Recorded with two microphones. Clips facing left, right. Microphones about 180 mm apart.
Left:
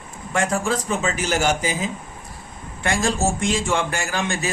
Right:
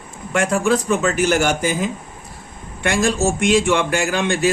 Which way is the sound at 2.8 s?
70° right (ahead or behind).